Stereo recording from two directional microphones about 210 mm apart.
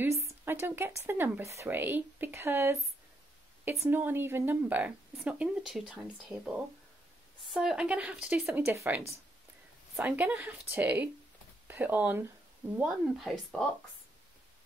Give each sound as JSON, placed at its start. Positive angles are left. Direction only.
{"t": 0.0, "sound": "speech", "side_deg": -10}